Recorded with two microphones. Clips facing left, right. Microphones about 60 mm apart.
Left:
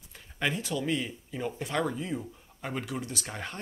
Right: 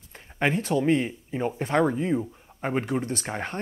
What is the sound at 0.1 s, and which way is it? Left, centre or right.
Speech, right.